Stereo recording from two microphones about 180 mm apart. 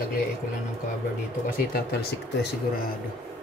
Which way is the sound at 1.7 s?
60° left (ahead or behind).